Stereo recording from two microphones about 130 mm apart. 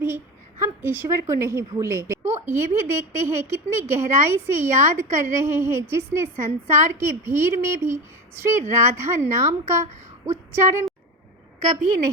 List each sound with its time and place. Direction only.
0.6 s a woman's voice: 20° right (ahead or behind)